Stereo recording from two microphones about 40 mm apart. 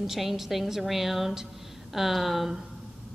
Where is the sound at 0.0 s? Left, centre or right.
Centre.